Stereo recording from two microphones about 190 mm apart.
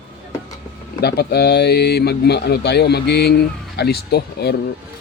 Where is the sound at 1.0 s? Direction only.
55° left (ahead or behind).